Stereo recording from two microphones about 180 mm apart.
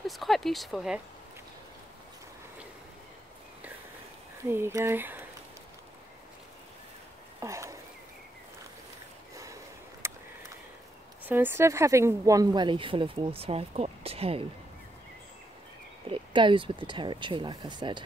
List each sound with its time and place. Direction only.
0.0 s speech: centre (ahead or behind)
4.5 s speech: 15° right (ahead or behind)
7.3 s a sound: 15° right (ahead or behind)
9.3 s a sound: 20° right (ahead or behind)
11.2 s speech: 10° right (ahead or behind); by 14.4 s 35° right (ahead or behind)
16.1 s speech: 30° right (ahead or behind)